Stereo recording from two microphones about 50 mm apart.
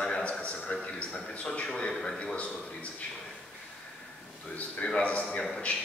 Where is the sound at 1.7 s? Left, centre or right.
Centre.